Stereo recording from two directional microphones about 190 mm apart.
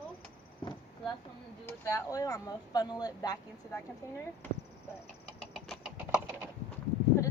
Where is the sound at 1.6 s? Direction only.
15° left (ahead or behind).